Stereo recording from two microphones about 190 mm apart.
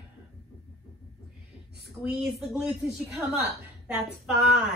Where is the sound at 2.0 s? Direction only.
Centre (ahead or behind).